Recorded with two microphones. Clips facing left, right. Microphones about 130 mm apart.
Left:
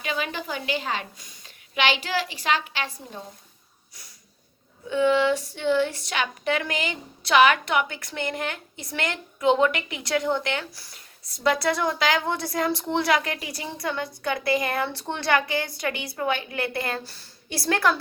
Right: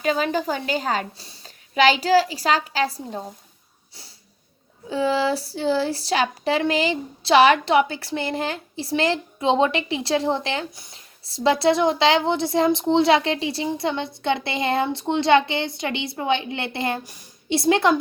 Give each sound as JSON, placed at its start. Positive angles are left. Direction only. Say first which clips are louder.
{"t": 0.0, "sound": "a woman's voice", "louder": "right 8 dB", "side_deg": -40}
{"t": 4.9, "sound": "speech", "louder": "left 1 dB", "side_deg": -35}